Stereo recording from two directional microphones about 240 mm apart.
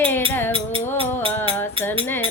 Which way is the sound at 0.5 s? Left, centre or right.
Right.